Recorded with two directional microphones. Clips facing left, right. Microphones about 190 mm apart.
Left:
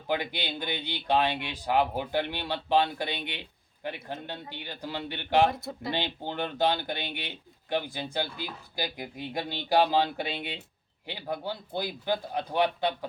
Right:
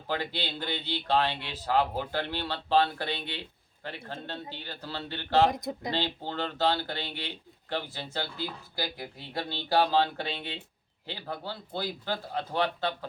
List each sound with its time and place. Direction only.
0.1 s speech: 15° left (ahead or behind)
5.5 s speech: 15° right (ahead or behind)
5.9 s speech: 15° left (ahead or behind)